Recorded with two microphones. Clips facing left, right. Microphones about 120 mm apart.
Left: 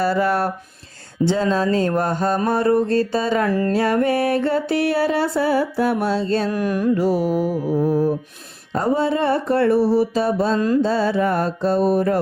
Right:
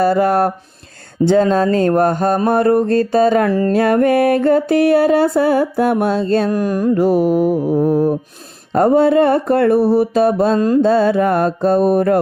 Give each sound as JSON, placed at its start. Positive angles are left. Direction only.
{"t": 0.0, "sound": "music", "side_deg": -45}
{"t": 6.6, "sound": "music", "side_deg": -35}
{"t": 10.6, "sound": "mantra", "side_deg": -40}
{"t": 10.8, "sound": "music", "side_deg": -55}